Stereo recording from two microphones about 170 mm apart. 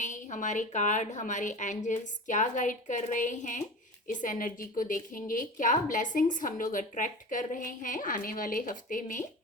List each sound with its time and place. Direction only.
0.0 s speech: 45° left (ahead or behind)